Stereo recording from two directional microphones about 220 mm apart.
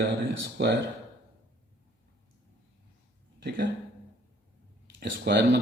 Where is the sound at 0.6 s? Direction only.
45° right (ahead or behind).